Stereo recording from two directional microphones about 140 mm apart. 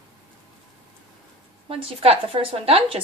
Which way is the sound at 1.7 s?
40° right (ahead or behind).